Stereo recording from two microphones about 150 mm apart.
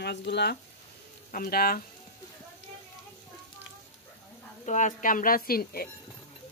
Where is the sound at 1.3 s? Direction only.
80° left.